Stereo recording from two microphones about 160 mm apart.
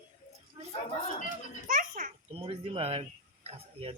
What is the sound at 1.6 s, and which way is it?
Speech, 60° right (ahead or behind).